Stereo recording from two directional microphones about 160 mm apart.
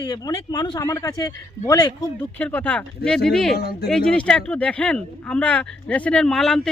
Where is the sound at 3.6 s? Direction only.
75° left (ahead or behind).